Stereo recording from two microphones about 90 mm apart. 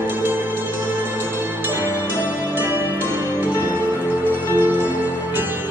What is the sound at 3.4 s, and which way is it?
Music, 20° right (ahead or behind).